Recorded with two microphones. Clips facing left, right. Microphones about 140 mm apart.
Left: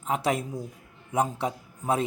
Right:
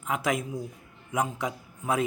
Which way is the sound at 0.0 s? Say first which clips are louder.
Left 2 dB; 30° left (ahead or behind).